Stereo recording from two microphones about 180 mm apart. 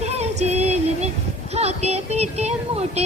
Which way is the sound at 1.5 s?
35° right (ahead or behind).